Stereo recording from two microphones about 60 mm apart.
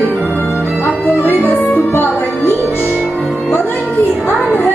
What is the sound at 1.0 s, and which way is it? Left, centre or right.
Music, left.